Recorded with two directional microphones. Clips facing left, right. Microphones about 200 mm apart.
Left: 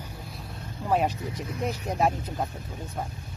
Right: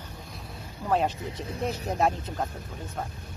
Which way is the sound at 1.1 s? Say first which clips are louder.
Left 1 dB; 25° right (ahead or behind).